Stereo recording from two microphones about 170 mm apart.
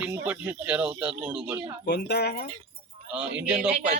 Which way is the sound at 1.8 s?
75° left (ahead or behind).